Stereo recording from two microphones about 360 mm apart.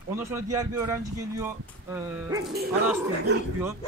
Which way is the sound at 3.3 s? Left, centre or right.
Right.